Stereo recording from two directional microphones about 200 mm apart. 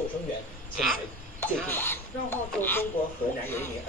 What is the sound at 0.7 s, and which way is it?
Speech, centre (ahead or behind).